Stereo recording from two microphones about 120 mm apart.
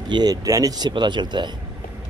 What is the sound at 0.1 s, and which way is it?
Speech, 35° right (ahead or behind).